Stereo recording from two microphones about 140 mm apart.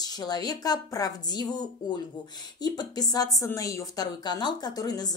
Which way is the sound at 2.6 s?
30° left (ahead or behind).